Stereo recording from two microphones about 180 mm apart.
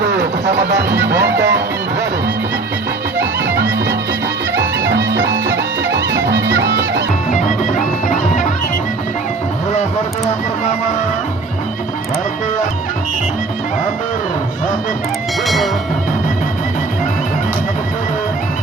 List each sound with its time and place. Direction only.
0.0 s music: 65° right (ahead or behind)
1.0 s speech: 70° right (ahead or behind)
3.4 s music: 80° right
4.5 s music: 90° right
7.3 s music: 45° left (ahead or behind)
15.4 s music: centre (ahead or behind)